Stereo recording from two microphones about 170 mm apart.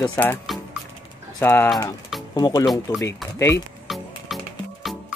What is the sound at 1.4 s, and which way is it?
Speech, 15° left (ahead or behind).